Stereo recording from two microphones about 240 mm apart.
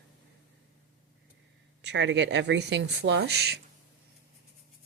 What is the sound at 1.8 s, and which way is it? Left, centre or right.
Speech, right.